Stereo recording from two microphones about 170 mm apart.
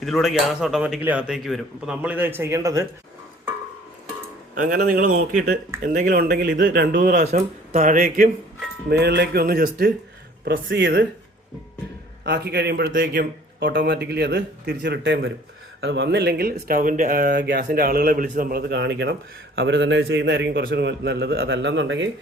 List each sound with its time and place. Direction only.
0.0 s a man's voice: centre (ahead or behind); by 2.8 s 15° right (ahead or behind)
4.5 s speech: 55° right (ahead or behind); by 7.3 s 75° right (ahead or behind)
7.3 s speech: 40° right (ahead or behind); by 8.3 s 55° right (ahead or behind)
8.9 s speech: 75° right (ahead or behind)
10.4 s a man's voice: 80° right
12.2 s speech: 75° right (ahead or behind); by 13.2 s 55° right (ahead or behind)
13.6 s a man's voice: 90° right